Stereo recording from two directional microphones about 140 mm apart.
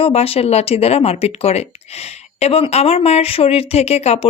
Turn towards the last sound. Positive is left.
turn(degrees=50)  # may be behind; listen again after turning